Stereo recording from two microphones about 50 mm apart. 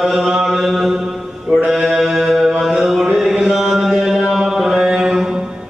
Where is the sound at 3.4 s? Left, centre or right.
Centre.